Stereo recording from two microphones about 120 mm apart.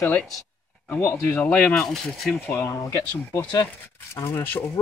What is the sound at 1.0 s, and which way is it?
Speech, 20° left (ahead or behind).